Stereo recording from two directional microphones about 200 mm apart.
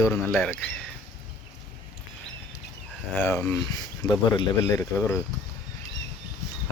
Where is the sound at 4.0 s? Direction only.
20° left (ahead or behind).